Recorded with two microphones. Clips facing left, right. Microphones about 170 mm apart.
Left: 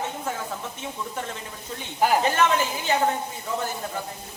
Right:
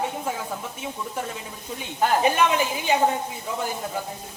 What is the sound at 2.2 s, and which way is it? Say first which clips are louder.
Speech: right 1 dB; 15° right (ahead or behind).